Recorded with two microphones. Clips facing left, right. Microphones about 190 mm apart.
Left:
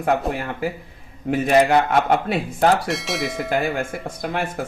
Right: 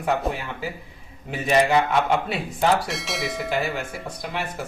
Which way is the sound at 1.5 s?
55° left (ahead or behind).